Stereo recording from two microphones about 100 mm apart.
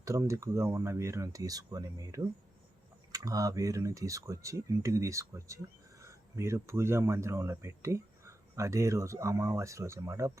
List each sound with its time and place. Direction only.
0.0 s speech: 30° right (ahead or behind)